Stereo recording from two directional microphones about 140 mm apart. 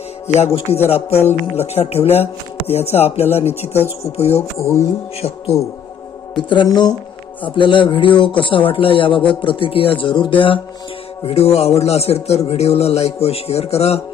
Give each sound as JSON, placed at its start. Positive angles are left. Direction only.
{"t": 0.3, "sound": "a man's voice", "side_deg": 50}
{"t": 4.5, "sound": "speech", "side_deg": 20}
{"t": 6.3, "sound": "a man's voice", "side_deg": 35}